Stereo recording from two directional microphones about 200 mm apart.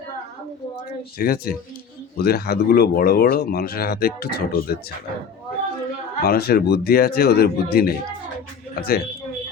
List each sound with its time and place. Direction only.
1.2 s speech: 50° left (ahead or behind)
6.2 s speech: 50° left (ahead or behind)